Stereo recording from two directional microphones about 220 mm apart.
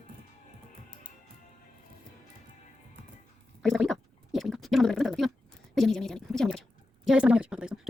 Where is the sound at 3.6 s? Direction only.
Centre (ahead or behind).